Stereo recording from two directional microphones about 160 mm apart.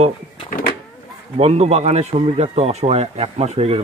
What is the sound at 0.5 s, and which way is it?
Power windows, 60° left (ahead or behind).